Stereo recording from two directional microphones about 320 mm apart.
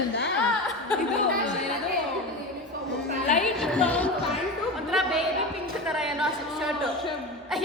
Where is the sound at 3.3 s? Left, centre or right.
Centre.